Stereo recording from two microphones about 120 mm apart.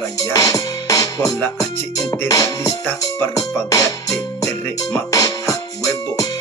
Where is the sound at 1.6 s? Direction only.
25° left (ahead or behind).